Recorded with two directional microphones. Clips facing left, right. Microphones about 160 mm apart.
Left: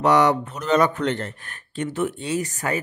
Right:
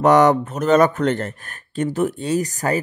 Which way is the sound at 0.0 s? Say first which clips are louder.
Right 4 dB; 50° right (ahead or behind).